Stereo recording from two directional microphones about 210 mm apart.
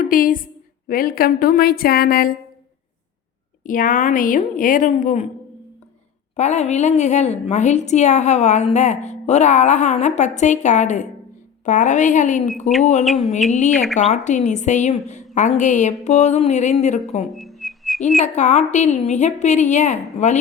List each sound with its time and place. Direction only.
0.1 s a woman's voice: 40° left (ahead or behind)
3.6 s a woman's voice: 40° left (ahead or behind)
6.3 s a woman's voice: 35° left (ahead or behind)
17.3 s whistling: centre (ahead or behind)
18.2 s a woman's voice: 35° left (ahead or behind)